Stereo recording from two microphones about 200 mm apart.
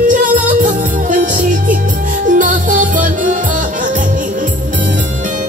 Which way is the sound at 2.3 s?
40° right (ahead or behind).